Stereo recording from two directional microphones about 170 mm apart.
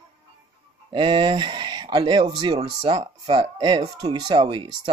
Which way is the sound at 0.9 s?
30° right (ahead or behind).